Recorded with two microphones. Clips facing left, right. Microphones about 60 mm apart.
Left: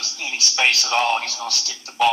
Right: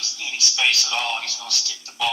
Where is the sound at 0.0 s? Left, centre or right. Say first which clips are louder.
Left 2 dB; left.